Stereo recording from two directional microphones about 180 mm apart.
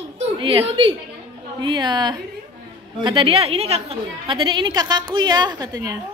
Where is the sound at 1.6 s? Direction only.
25° right (ahead or behind).